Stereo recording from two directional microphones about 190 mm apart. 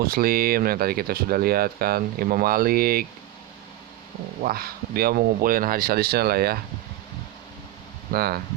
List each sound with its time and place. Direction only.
0.0 s speech: 50° right (ahead or behind)
4.4 s speech: 50° right (ahead or behind)
8.1 s speech: 55° right (ahead or behind)